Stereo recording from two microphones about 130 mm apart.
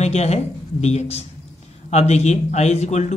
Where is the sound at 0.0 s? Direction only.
55° left (ahead or behind).